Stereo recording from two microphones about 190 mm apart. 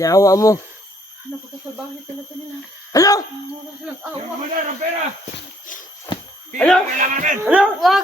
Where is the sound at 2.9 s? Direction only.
20° left (ahead or behind).